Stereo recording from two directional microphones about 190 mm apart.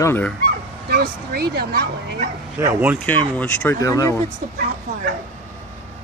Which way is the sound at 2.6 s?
10° right (ahead or behind).